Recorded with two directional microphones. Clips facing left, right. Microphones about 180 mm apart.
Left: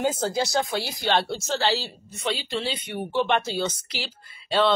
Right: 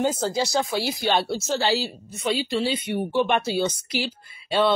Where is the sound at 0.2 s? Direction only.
Centre (ahead or behind).